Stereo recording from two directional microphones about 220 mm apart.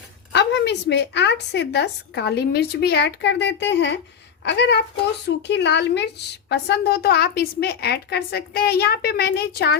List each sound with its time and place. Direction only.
0.3 s a woman's voice: 50° left (ahead or behind)